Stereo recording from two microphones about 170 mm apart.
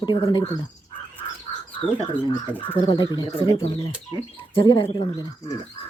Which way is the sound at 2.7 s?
30° left (ahead or behind).